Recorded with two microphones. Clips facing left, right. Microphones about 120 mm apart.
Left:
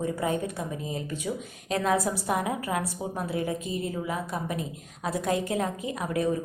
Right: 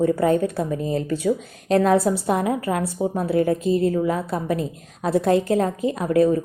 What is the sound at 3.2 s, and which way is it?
A woman's voice, 55° right (ahead or behind).